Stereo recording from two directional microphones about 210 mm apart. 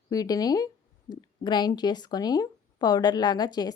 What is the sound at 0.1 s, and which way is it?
Speech, 15° left (ahead or behind).